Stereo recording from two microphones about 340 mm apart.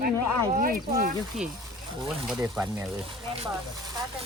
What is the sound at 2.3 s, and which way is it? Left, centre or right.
Speech, centre.